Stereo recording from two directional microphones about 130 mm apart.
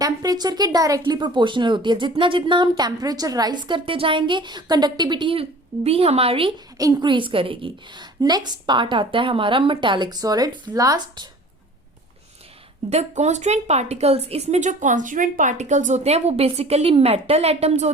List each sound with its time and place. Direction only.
0.0 s speech: 30° right (ahead or behind); by 6.5 s 45° right (ahead or behind)
6.7 s speech: 30° right (ahead or behind)
12.9 s speech: 55° right (ahead or behind)